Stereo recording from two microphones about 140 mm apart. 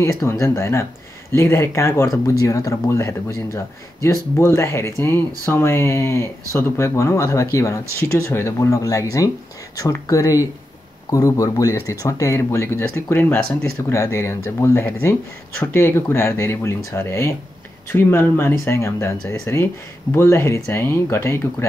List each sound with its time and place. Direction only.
0.0 s speech: 20° left (ahead or behind)